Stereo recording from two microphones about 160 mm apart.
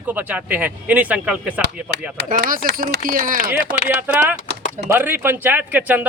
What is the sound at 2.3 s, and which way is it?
Speech, 60° right (ahead or behind).